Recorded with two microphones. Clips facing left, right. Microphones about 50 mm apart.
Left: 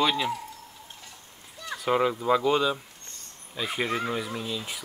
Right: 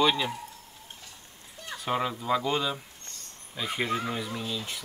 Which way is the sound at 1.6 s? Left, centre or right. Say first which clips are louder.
Left 4 dB; left.